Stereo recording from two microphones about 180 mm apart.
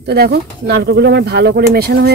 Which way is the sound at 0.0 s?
65° right (ahead or behind).